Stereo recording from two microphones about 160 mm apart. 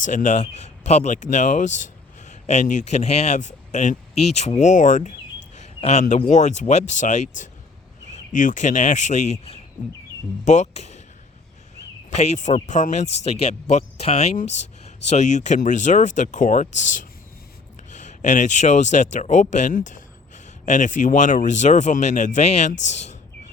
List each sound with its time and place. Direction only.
0.0 s speech: 50° left (ahead or behind)
12.1 s speech: 45° left (ahead or behind)